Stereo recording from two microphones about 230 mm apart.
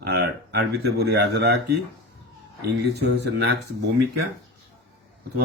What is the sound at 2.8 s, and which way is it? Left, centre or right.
Speech, right.